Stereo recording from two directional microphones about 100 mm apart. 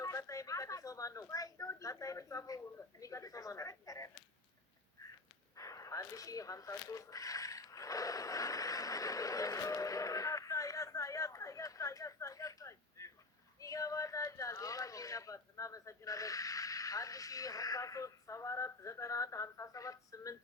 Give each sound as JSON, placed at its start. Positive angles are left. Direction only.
{"t": 0.0, "sound": "speech", "side_deg": 35}
{"t": 5.5, "sound": "a sound", "side_deg": 35}
{"t": 13.6, "sound": "speech", "side_deg": 35}